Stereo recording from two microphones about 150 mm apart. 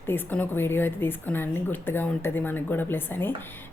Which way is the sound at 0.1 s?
10° left (ahead or behind).